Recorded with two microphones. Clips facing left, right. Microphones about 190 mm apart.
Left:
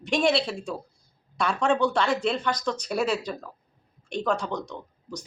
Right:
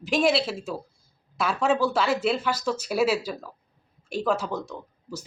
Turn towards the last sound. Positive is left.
turn(degrees=-5)  # may be behind; listen again after turning